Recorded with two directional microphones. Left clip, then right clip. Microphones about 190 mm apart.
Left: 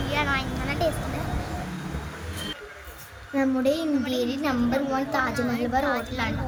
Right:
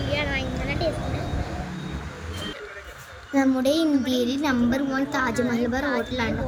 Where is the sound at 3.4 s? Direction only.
25° right (ahead or behind).